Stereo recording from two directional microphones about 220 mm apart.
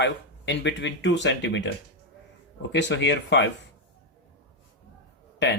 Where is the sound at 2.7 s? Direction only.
50° left (ahead or behind).